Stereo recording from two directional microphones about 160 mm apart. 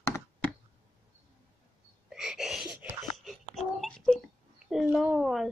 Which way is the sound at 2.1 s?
5° right (ahead or behind).